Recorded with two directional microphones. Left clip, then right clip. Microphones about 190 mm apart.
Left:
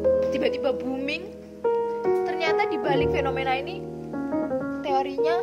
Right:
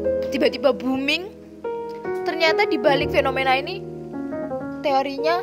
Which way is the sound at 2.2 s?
55° right (ahead or behind).